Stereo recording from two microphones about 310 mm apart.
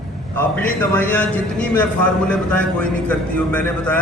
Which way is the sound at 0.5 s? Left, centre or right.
Centre.